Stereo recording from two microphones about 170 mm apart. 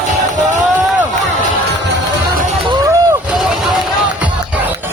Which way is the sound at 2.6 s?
20° right (ahead or behind).